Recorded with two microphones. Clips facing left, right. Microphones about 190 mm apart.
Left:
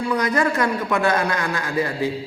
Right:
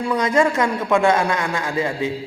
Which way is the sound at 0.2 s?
25° right (ahead or behind).